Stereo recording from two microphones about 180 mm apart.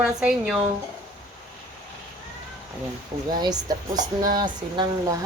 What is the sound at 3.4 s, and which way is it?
A woman's voice, 20° right (ahead or behind).